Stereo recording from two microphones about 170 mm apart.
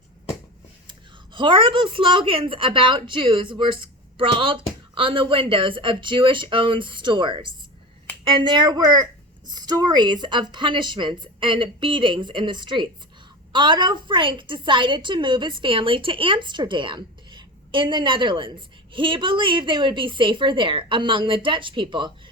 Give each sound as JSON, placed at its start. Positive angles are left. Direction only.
{"t": 0.9, "sound": "a woman's voice", "side_deg": -30}